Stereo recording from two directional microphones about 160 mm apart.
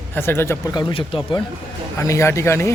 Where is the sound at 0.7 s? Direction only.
35° left (ahead or behind).